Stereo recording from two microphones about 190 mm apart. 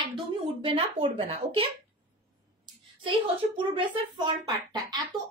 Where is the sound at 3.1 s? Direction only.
25° right (ahead or behind).